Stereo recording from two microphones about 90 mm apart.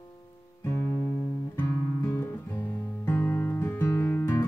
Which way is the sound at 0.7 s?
25° left (ahead or behind).